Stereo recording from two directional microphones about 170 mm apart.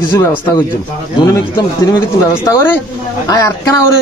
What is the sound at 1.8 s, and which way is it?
Speech, 20° left (ahead or behind).